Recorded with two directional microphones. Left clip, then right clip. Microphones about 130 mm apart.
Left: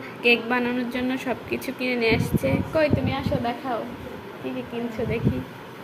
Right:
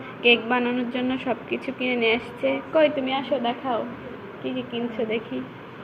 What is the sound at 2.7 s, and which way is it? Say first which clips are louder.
A woman's voice: right 3 dB; 5° right (ahead or behind).